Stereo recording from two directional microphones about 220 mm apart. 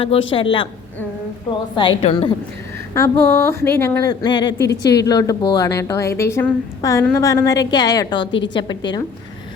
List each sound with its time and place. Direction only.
0.0 s a woman's voice: 25° left (ahead or behind)
2.9 s a woman's voice: 10° left (ahead or behind)